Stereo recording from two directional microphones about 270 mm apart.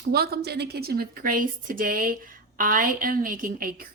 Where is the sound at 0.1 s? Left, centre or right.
Right.